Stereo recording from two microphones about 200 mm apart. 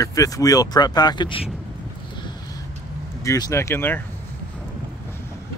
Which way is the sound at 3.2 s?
15° left (ahead or behind).